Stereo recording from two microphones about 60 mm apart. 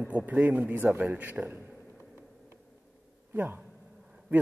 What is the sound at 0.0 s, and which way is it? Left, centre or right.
Speech, right.